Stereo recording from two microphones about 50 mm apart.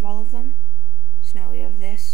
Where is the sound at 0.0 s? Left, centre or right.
Centre.